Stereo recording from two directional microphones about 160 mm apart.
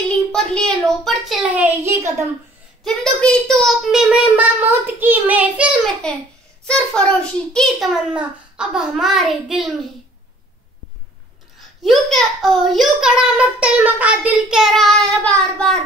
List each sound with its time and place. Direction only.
0.3 s a child's voice: 5° left (ahead or behind)
1.9 s a child's voice: 15° right (ahead or behind)
2.8 s a child's voice: 5° left (ahead or behind)
7.9 s a child's voice: 5° right (ahead or behind)
11.8 s a child's voice: centre (ahead or behind)